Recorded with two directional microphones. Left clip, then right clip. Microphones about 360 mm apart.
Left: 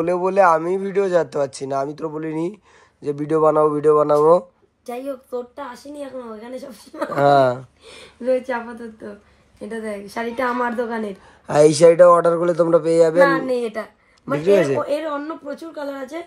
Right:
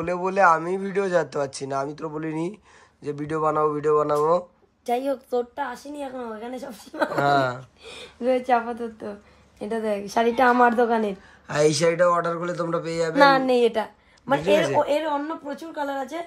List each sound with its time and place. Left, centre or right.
0.0 s speech: centre
4.8 s a woman's voice: right
7.2 s speech: centre
8.2 s a woman's voice: right
9.6 s a woman's voice: right
11.4 s speech: centre
13.3 s a woman's voice: right
14.4 s speech: centre